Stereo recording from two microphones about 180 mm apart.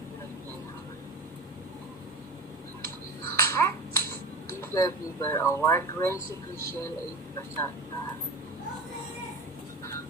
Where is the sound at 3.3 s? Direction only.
15° left (ahead or behind).